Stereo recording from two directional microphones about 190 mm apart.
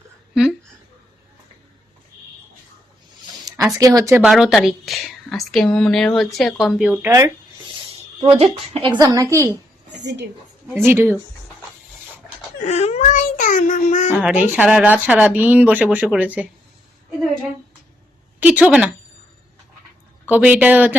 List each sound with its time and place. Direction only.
3.8 s speech: 20° right (ahead or behind)
4.2 s a woman's voice: 5° right (ahead or behind)
8.2 s a woman's voice: 30° right (ahead or behind)
10.0 s a woman's voice: 65° right (ahead or behind)
10.8 s speech: 15° right (ahead or behind)
12.6 s a sound: 35° left (ahead or behind)
14.2 s speech: 5° right (ahead or behind)
18.3 s a sound: 5° right (ahead or behind)
20.3 s speech: 5° right (ahead or behind)